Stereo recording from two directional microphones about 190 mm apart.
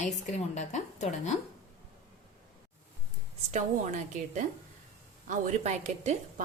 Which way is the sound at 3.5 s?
40° right (ahead or behind).